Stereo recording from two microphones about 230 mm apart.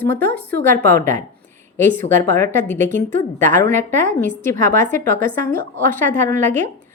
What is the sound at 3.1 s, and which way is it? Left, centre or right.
A woman's voice, right.